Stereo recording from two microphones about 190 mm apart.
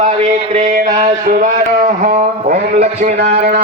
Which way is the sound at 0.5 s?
45° right (ahead or behind).